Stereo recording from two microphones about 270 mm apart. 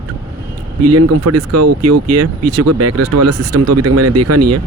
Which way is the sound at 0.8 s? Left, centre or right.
Right.